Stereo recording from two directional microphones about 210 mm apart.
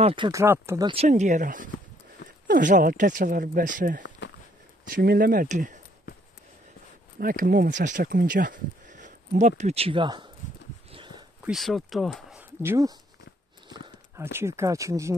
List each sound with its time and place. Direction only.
0.0 s speech: 25° right (ahead or behind)
0.9 s speech: 35° right (ahead or behind)
7.2 s speech: 40° right (ahead or behind); by 10.3 s 20° right (ahead or behind)
10.9 s a sound: 25° right (ahead or behind)
11.4 s speech: centre (ahead or behind)